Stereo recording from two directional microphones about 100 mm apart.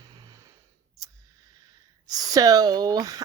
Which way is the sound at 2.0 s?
35° right (ahead or behind).